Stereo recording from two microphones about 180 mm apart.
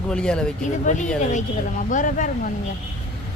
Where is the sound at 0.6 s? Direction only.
45° left (ahead or behind).